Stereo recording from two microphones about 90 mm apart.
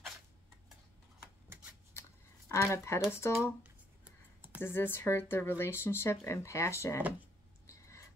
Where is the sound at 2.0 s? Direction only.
30° left (ahead or behind).